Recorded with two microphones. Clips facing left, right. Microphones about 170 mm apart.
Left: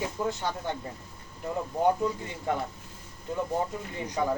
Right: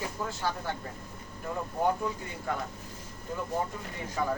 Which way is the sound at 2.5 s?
20° left (ahead or behind).